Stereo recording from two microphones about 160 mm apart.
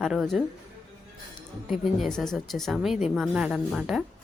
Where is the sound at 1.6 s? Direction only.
Centre (ahead or behind).